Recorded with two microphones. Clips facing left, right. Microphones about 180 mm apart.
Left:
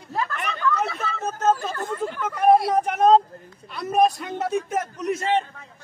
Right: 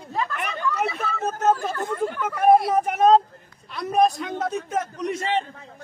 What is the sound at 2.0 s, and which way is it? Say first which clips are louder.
A man's voice: even; 5° right (ahead or behind).